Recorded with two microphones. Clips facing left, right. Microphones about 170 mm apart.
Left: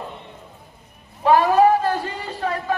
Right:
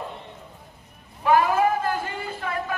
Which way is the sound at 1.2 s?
40° left (ahead or behind).